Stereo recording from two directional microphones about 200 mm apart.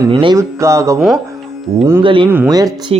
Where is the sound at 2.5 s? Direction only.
20° right (ahead or behind).